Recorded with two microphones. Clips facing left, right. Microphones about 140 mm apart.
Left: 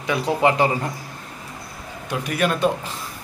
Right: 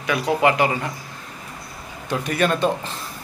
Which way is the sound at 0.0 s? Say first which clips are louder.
Even; 25° left (ahead or behind).